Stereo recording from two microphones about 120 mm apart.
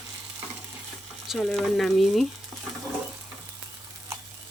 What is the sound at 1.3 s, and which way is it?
Speech, centre (ahead or behind).